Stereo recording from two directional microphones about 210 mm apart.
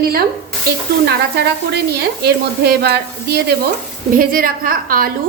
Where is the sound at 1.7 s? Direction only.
50° right (ahead or behind).